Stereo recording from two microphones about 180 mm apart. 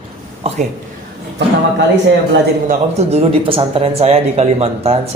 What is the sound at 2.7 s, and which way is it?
Speech, 35° right (ahead or behind).